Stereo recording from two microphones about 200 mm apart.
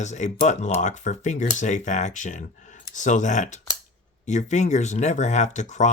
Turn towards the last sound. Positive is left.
turn(degrees=35)  # may be behind; listen again after turning